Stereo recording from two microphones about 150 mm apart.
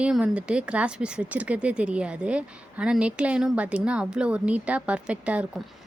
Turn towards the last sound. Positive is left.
turn(degrees=-10)  # may be behind; listen again after turning